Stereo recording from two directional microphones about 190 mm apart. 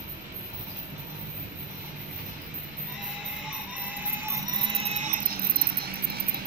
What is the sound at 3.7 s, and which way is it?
Music, 10° right (ahead or behind).